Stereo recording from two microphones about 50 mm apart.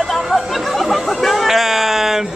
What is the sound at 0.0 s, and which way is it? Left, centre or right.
Chatter, centre.